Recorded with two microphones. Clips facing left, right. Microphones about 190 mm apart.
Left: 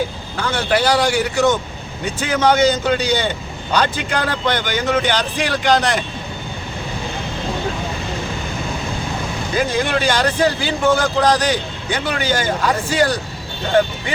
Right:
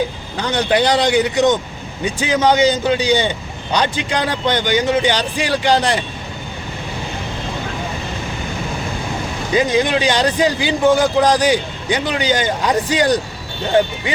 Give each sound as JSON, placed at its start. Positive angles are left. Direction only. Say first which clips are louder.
{"t": 0.3, "sound": "speech", "louder": "right 2 dB", "side_deg": -20}
{"t": 9.6, "sound": "speech", "louder": "right 3 dB", "side_deg": -15}